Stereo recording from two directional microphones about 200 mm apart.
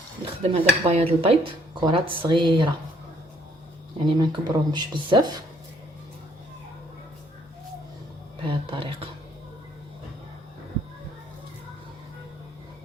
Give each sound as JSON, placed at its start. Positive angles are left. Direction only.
{"t": 0.5, "sound": "speech", "side_deg": -30}
{"t": 3.9, "sound": "speech", "side_deg": -20}
{"t": 8.4, "sound": "speech", "side_deg": -25}